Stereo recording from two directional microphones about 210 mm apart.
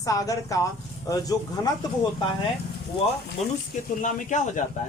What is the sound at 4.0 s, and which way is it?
Speech, 35° left (ahead or behind).